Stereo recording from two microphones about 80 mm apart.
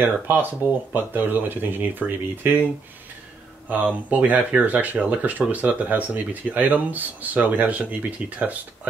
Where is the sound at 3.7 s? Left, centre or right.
Centre.